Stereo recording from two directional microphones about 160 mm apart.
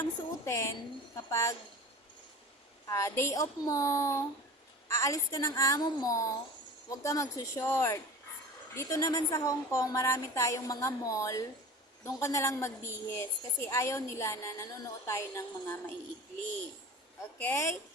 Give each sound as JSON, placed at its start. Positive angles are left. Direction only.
{"t": 0.0, "sound": "a woman's voice", "side_deg": 15}
{"t": 2.9, "sound": "a woman's voice", "side_deg": 20}
{"t": 17.3, "sound": "a woman's voice", "side_deg": 10}